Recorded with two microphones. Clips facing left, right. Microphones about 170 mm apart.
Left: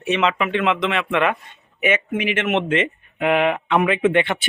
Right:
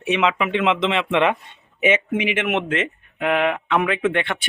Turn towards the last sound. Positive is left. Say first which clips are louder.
# left 3 dB
turn(degrees=5)  # may be behind; listen again after turning